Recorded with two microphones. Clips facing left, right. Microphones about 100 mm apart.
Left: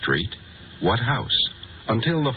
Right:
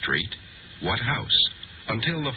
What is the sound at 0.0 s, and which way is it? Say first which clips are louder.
A man's voice: left 5 dB; 35° left (ahead or behind).